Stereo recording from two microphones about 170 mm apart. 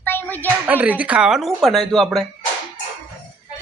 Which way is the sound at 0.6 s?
10° right (ahead or behind).